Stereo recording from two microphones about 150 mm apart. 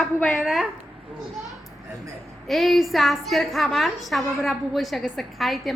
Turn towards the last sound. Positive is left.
turn(degrees=0)  # may be behind; listen again after turning